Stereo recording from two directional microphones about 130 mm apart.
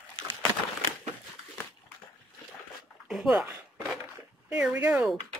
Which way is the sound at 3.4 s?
15° right (ahead or behind).